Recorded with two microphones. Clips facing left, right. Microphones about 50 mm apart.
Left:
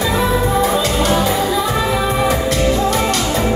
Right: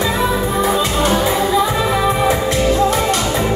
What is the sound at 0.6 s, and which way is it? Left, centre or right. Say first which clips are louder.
Music: even; centre.